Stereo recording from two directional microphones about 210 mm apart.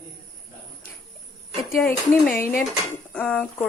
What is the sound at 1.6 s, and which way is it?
Speech, centre (ahead or behind).